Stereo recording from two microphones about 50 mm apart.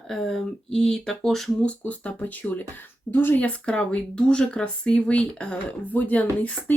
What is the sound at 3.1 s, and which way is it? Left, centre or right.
Speech, left.